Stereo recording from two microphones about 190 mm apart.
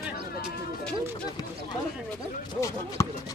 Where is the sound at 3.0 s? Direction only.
15° left (ahead or behind).